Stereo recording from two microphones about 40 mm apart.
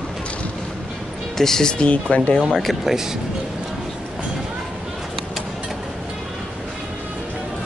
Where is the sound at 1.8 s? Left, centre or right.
Left.